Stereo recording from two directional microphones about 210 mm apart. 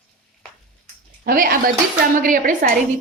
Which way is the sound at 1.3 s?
45° right (ahead or behind).